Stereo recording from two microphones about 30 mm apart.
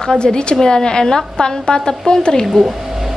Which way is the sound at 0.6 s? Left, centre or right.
Left.